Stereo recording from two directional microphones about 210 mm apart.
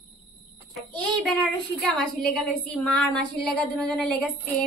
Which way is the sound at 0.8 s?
5° left (ahead or behind).